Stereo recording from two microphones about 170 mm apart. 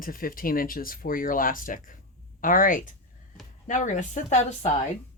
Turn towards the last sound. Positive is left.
turn(degrees=40)  # may be behind; listen again after turning